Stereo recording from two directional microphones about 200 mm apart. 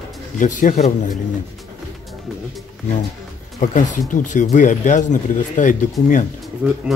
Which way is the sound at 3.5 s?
40° left (ahead or behind).